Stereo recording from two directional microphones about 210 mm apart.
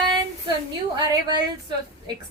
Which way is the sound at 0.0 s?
20° right (ahead or behind).